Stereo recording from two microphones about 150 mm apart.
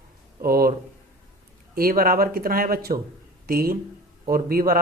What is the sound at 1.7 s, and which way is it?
Speech, 75° right (ahead or behind).